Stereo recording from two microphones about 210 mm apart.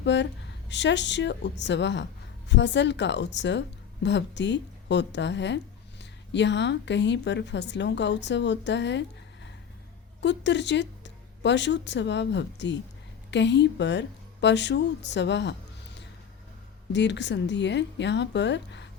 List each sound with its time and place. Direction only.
0.0 s a woman's voice: 55° left (ahead or behind)
16.9 s a woman's voice: 55° left (ahead or behind)